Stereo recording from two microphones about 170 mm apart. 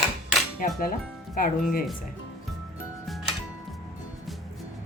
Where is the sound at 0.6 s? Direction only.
55° left (ahead or behind).